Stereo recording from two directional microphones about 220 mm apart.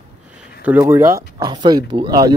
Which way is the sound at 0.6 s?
10° right (ahead or behind).